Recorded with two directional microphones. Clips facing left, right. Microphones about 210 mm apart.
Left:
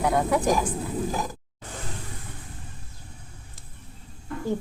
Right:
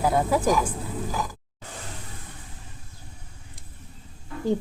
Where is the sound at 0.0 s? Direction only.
5° right (ahead or behind).